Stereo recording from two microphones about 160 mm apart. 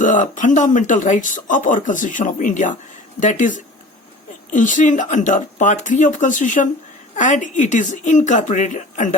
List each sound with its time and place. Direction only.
0.0 s speech: 55° left (ahead or behind)